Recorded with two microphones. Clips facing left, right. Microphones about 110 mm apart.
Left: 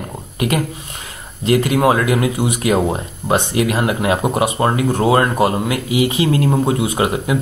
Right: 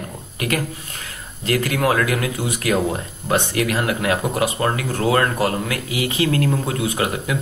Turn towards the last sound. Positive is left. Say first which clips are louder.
# left 4 dB
turn(degrees=20)  # may be behind; listen again after turning